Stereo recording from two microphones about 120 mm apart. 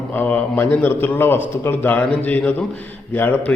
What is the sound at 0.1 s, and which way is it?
A man's voice, 15° left (ahead or behind).